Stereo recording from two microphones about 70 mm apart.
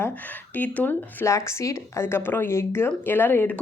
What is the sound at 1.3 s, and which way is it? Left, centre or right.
Speech, left.